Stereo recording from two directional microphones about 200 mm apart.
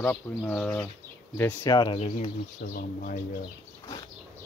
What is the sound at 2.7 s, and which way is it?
Speech, 45° left (ahead or behind).